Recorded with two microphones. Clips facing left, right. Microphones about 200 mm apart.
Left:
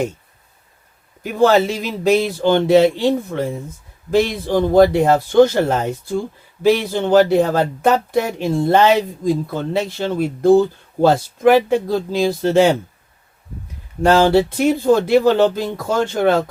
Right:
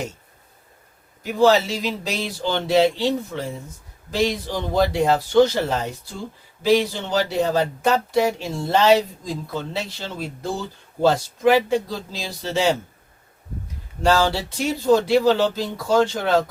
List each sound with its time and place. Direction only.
1.2 s speech: 55° left (ahead or behind)
14.0 s speech: 55° left (ahead or behind)